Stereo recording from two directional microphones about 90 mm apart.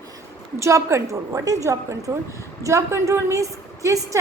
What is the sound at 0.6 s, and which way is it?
A woman's voice, 35° right (ahead or behind).